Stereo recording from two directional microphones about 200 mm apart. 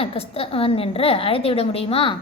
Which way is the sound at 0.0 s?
30° left (ahead or behind).